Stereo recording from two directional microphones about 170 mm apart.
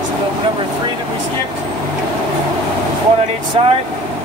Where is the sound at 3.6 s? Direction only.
35° right (ahead or behind).